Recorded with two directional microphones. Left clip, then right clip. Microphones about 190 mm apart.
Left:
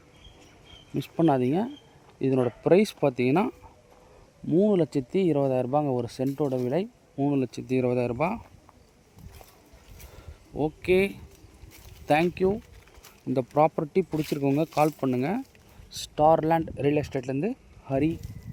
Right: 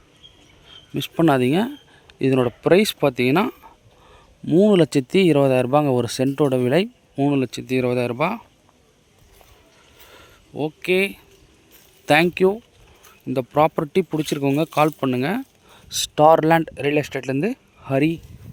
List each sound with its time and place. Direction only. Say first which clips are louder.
0.9 s speech: right 6 dB; centre (ahead or behind)
4.4 s speech: right 7 dB; 15° right (ahead or behind)
10.1 s a sound: right 5 dB; centre (ahead or behind)
12.0 s speech: right 7 dB; 10° right (ahead or behind)
13.2 s speech: right 4 dB; 5° right (ahead or behind)
15.9 s speech: right 7 dB; 15° right (ahead or behind)